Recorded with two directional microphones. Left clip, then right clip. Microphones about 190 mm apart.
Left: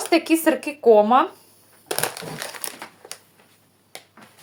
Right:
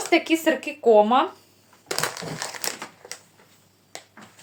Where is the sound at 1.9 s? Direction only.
15° left (ahead or behind).